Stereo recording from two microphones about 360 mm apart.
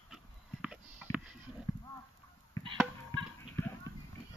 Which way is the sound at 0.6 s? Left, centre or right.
Centre.